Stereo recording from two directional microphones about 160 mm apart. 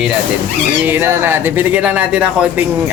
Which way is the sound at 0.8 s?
10° right (ahead or behind).